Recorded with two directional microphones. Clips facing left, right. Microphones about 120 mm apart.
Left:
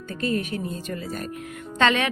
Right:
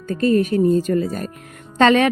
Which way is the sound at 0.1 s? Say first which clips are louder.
Right 10 dB; 40° right (ahead or behind).